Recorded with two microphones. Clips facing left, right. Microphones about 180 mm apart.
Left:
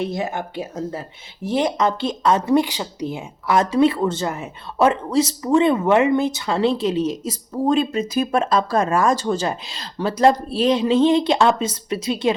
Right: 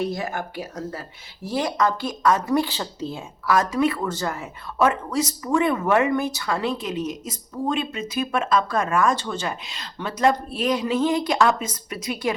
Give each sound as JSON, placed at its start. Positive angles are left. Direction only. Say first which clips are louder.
{"t": 0.0, "sound": "speech", "louder": "left 2 dB", "side_deg": 20}